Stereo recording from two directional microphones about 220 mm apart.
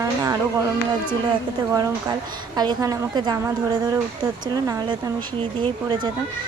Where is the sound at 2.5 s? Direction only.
20° right (ahead or behind).